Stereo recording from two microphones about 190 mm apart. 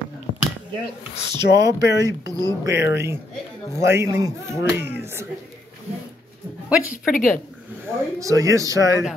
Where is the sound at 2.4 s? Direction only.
15° right (ahead or behind).